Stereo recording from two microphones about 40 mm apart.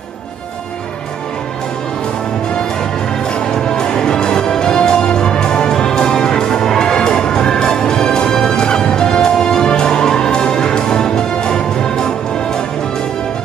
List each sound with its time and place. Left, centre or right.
3.5 s music: centre